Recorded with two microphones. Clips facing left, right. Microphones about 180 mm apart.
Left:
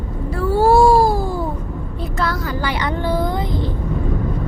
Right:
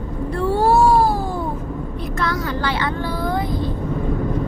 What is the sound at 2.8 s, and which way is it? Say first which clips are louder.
Vehicle: left 3 dB; 20° left (ahead or behind).